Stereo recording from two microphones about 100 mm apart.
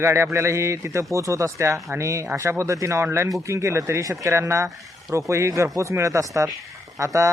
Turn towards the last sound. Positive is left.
turn(degrees=-30)  # may be behind; listen again after turning